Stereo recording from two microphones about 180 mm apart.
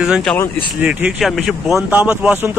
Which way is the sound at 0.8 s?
10° right (ahead or behind).